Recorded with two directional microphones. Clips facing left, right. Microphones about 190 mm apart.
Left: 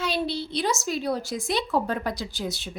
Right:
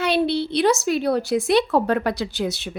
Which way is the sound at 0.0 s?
65° right (ahead or behind).